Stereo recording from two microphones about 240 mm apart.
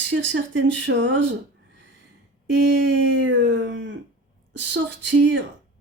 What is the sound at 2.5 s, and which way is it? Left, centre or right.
Speech, right.